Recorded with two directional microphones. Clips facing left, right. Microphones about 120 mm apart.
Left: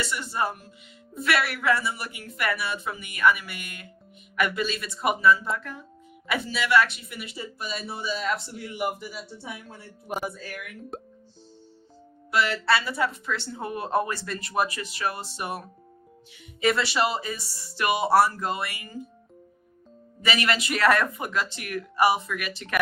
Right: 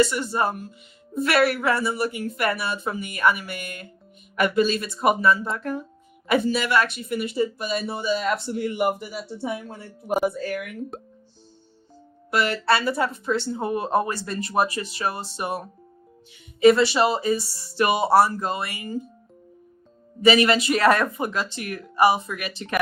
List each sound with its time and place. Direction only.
0.0 s speech: 40° right (ahead or behind); by 9.7 s 60° right (ahead or behind)
12.3 s speech: 50° right (ahead or behind); by 18.9 s 30° right (ahead or behind)
20.2 s speech: 30° right (ahead or behind)